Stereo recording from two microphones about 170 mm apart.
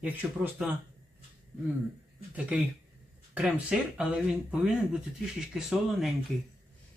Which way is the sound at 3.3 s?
5° right (ahead or behind).